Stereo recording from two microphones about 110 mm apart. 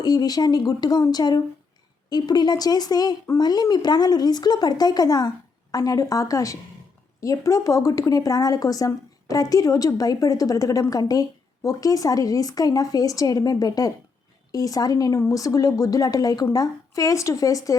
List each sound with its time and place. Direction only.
0.0 s a woman's voice: 35° left (ahead or behind)